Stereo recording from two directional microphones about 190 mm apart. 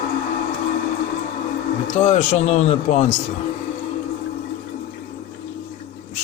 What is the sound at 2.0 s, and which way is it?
Speech, 40° left (ahead or behind).